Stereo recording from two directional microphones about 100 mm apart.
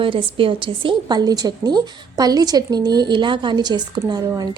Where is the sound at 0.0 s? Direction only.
60° right (ahead or behind).